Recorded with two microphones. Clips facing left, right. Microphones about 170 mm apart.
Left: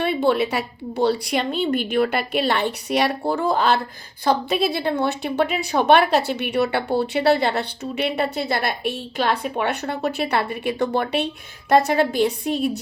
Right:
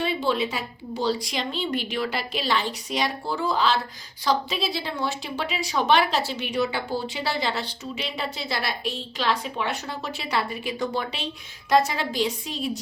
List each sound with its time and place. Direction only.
0.0 s a woman's voice: 60° left (ahead or behind)